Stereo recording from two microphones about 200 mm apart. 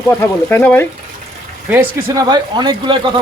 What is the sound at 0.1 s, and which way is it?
Speech, 10° left (ahead or behind).